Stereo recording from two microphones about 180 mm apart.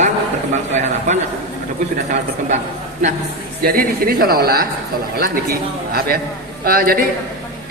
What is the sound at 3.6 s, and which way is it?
A man's voice, 55° right (ahead or behind).